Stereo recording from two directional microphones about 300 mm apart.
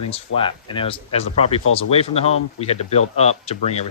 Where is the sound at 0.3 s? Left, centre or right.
Centre.